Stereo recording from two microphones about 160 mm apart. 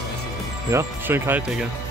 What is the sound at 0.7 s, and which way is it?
Speech, 15° right (ahead or behind).